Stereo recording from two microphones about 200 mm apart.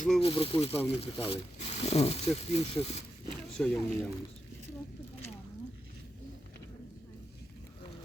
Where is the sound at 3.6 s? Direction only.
5° left (ahead or behind).